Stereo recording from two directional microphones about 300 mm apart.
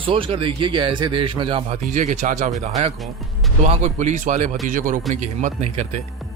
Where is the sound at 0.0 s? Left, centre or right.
Centre.